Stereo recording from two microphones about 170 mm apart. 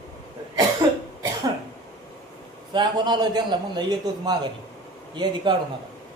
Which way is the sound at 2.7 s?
25° right (ahead or behind).